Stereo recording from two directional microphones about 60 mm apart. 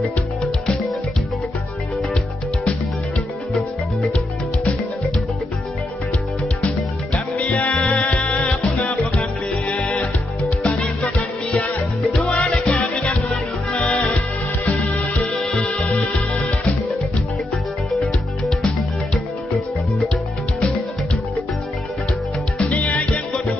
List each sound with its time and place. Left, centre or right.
7.3 s music: left
12.1 s music: centre
13.7 s music: left
14.0 s music: left
22.6 s music: left